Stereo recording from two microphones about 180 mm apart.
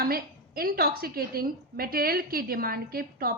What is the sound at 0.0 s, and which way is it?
A woman's voice, 55° right (ahead or behind).